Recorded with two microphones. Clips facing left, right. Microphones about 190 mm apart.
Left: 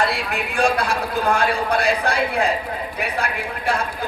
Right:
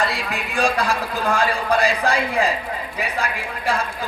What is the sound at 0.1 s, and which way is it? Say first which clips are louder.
A man's voice: left 2 dB; 60° left (ahead or behind).